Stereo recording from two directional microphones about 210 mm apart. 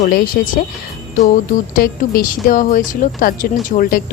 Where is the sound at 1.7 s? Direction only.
45° left (ahead or behind).